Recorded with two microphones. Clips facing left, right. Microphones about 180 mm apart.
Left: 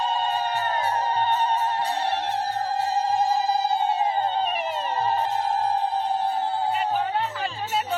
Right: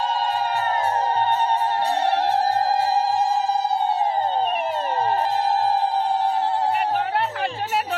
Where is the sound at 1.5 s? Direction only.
55° right (ahead or behind).